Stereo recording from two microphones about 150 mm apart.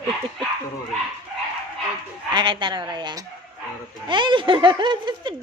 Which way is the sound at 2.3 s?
30° right (ahead or behind).